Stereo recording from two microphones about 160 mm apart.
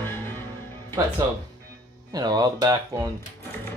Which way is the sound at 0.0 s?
15° left (ahead or behind).